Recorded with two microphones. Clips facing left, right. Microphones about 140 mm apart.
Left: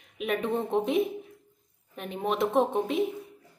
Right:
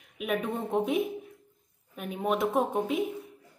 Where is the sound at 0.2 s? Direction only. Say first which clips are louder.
Left 2 dB; 5° right (ahead or behind).